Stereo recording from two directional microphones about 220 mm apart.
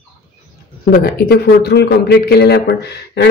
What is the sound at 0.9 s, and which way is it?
A man's voice, 45° left (ahead or behind).